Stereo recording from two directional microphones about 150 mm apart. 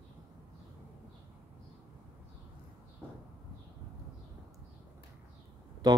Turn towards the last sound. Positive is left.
turn(degrees=-25)  # may be behind; listen again after turning